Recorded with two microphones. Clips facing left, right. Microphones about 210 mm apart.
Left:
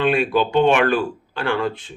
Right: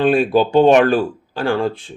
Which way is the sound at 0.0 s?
35° right (ahead or behind).